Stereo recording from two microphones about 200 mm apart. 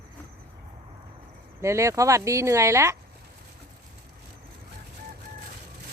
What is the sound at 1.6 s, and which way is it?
Speech, 15° right (ahead or behind).